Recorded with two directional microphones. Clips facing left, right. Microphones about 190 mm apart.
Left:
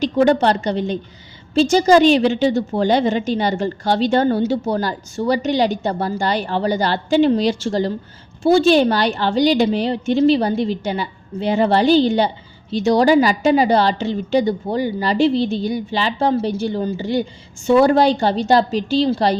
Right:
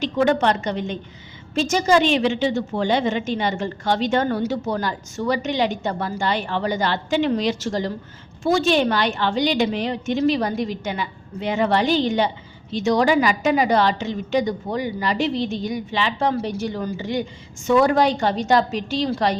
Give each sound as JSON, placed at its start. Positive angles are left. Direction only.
{"t": 0.0, "sound": "a woman's voice", "side_deg": 35}